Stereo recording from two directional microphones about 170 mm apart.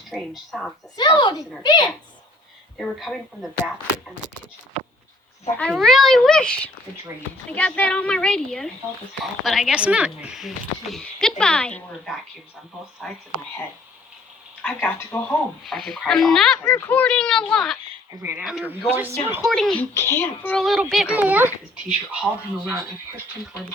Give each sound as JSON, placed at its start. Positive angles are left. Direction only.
{"t": 0.1, "sound": "a child's voice", "side_deg": 0}
{"t": 0.9, "sound": "speech", "side_deg": 25}
{"t": 2.7, "sound": "a child's voice", "side_deg": 5}
{"t": 5.5, "sound": "a child's voice", "side_deg": 5}
{"t": 14.6, "sound": "a child's voice", "side_deg": 5}
{"t": 18.2, "sound": "speech", "side_deg": -10}
{"t": 19.5, "sound": "a child's voice", "side_deg": 0}
{"t": 19.9, "sound": "a child's voice", "side_deg": 15}